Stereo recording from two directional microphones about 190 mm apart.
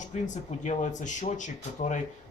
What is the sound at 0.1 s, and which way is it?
Speech, 40° left (ahead or behind).